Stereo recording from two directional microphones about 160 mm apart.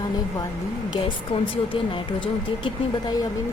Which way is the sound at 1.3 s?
35° left (ahead or behind).